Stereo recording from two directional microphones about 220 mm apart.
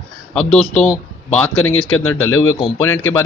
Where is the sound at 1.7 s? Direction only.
70° left (ahead or behind).